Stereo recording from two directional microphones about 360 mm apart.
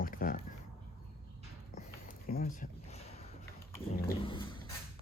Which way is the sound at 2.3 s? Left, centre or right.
Left.